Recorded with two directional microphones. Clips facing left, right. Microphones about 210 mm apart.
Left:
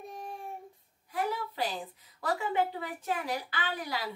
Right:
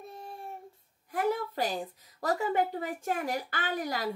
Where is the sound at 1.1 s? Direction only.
50° right (ahead or behind).